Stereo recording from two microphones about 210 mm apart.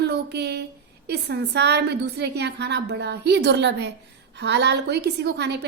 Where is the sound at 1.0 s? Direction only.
50° right (ahead or behind).